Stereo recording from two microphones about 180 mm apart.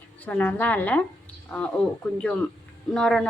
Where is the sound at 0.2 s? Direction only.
10° left (ahead or behind).